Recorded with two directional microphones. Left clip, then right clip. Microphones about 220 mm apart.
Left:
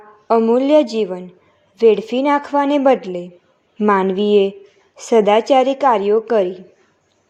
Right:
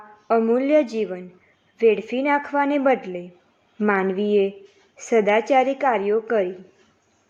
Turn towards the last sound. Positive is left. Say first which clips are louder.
# left 6 dB
turn(degrees=15)  # may be behind; listen again after turning